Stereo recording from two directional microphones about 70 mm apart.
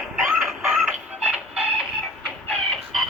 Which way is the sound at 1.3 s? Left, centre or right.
Centre.